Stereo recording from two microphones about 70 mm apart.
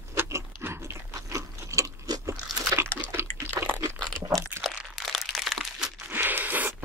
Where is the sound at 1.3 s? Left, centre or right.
Right.